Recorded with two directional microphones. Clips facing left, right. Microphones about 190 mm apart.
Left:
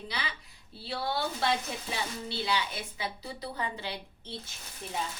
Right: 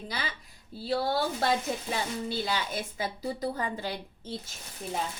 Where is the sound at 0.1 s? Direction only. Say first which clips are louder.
Right 2 dB; 45° right (ahead or behind).